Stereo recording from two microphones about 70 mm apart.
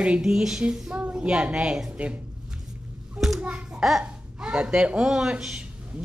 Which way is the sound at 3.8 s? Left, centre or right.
Centre.